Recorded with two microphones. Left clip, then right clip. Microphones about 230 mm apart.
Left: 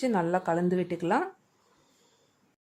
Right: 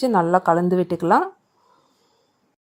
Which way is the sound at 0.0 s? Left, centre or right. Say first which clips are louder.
Right 10 dB; centre.